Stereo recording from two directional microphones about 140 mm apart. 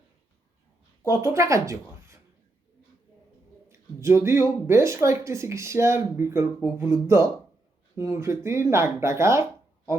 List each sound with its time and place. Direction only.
1.0 s speech: 20° right (ahead or behind)
3.7 s speech: 20° right (ahead or behind)